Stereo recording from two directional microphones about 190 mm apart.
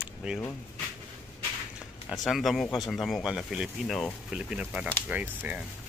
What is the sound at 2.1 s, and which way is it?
Speech, centre (ahead or behind).